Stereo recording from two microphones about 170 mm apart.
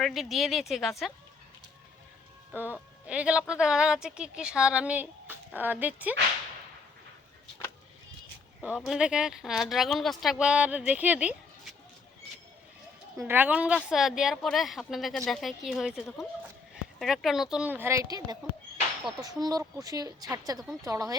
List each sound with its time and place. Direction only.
0.0 s speech: centre (ahead or behind)
3.1 s speech: 5° right (ahead or behind)
8.6 s speech: 5° right (ahead or behind)
13.1 s speech: 10° right (ahead or behind)